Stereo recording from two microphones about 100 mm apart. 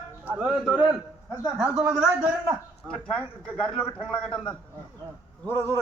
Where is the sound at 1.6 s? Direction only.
15° right (ahead or behind).